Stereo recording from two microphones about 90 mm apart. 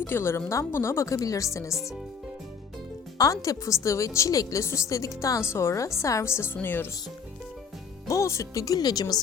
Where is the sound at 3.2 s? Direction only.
40° left (ahead or behind); by 6.8 s 20° left (ahead or behind).